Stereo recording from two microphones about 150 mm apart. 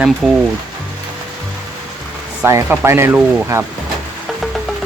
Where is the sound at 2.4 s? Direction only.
15° right (ahead or behind).